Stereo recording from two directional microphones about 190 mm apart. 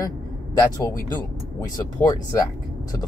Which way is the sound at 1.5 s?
20° left (ahead or behind).